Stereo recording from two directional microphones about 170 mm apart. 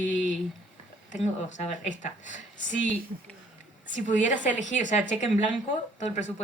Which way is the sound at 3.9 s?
45° left (ahead or behind).